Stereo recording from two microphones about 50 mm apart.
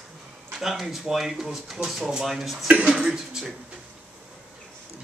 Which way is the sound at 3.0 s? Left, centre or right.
Centre.